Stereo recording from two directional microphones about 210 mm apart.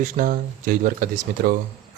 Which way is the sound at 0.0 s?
40° right (ahead or behind).